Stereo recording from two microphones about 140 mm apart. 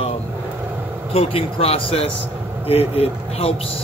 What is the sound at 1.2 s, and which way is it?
Speech, 45° left (ahead or behind).